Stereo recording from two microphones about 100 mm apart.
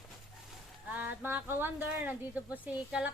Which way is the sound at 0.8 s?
20° right (ahead or behind).